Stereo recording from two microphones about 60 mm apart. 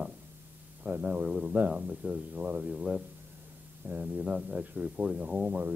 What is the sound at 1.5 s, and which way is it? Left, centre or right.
Speech, right.